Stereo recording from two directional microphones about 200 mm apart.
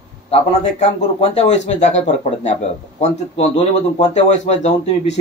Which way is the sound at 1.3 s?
35° left (ahead or behind).